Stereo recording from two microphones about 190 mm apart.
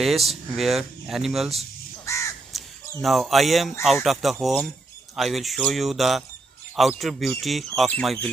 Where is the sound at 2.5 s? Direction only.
Centre (ahead or behind).